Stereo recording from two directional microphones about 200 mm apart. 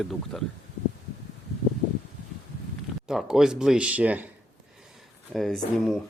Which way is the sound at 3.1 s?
Centre (ahead or behind).